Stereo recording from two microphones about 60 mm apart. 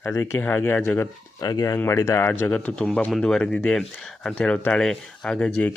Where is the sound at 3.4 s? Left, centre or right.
Left.